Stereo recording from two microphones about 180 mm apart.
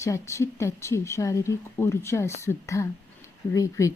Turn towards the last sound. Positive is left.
turn(degrees=15)  # may be behind; listen again after turning